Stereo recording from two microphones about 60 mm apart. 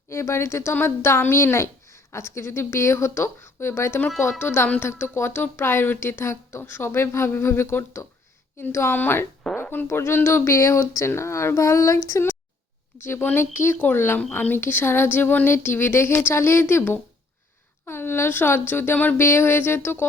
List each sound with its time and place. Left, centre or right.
0.1 s speech: left
9.6 s a sound: left
9.9 s a woman's voice: left
13.0 s speech: left